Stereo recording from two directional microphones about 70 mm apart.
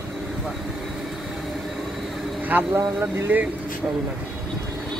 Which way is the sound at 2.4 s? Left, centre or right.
Right.